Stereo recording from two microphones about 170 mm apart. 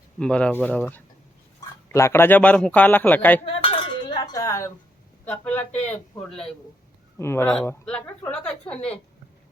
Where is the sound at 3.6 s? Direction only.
30° left (ahead or behind).